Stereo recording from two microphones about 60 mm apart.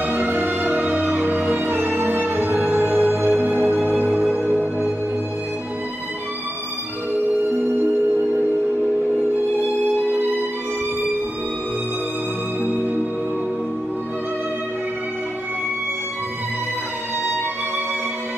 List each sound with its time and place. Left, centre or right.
0.0 s music: right